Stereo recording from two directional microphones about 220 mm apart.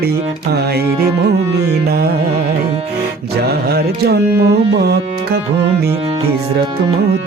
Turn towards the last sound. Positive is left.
turn(degrees=-45)  # may be behind; listen again after turning